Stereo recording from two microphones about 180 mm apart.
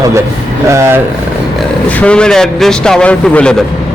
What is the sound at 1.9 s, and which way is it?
A man's voice, 5° left (ahead or behind).